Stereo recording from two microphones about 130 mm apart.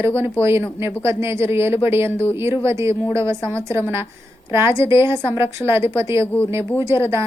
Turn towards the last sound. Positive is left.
turn(degrees=-20)  # may be behind; listen again after turning